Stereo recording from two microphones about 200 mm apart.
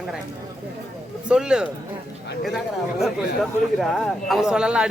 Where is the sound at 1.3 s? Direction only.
5° right (ahead or behind).